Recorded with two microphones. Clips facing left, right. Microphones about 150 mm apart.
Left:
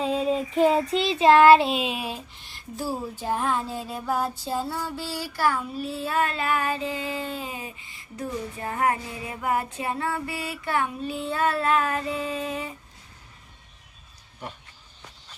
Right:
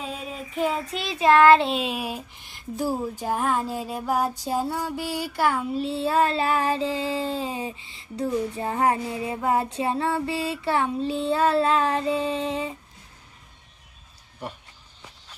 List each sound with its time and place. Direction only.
0.0 s child singing: 30° left (ahead or behind); by 1.6 s 15° left (ahead or behind)
1.6 s speech: centre (ahead or behind)
2.5 s music: 15° right (ahead or behind)